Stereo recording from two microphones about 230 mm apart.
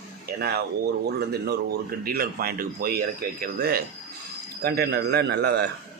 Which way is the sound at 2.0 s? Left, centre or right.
Right.